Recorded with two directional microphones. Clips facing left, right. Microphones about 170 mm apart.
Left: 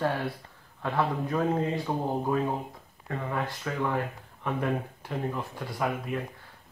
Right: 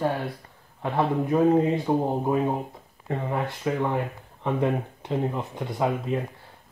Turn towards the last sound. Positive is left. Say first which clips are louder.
# right 5 dB
turn(degrees=-25)  # may be behind; listen again after turning